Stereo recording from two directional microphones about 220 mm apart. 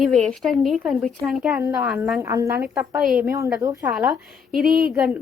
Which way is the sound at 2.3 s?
15° right (ahead or behind).